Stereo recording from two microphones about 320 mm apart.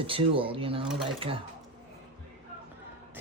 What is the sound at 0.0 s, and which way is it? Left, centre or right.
Speech, centre.